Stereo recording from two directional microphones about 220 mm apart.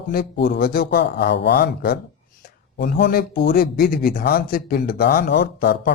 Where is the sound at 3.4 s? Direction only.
40° left (ahead or behind).